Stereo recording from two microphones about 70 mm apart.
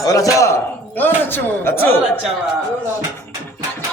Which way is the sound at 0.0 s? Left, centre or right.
Left.